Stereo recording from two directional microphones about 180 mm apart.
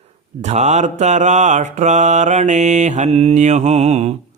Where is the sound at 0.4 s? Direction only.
40° right (ahead or behind).